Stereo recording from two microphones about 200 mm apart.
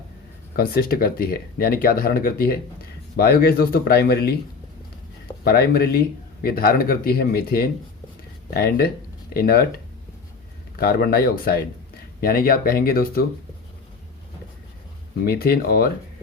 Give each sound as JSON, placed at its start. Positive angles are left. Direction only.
{"t": 0.5, "sound": "speech", "side_deg": 50}
{"t": 5.4, "sound": "speech", "side_deg": 50}
{"t": 10.8, "sound": "speech", "side_deg": 50}
{"t": 15.3, "sound": "speech", "side_deg": 50}